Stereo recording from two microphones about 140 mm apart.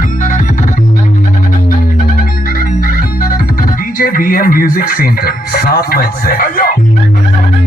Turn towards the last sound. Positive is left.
turn(degrees=90)